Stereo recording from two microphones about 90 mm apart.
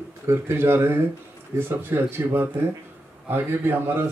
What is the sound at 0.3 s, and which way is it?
Speech, 25° right (ahead or behind).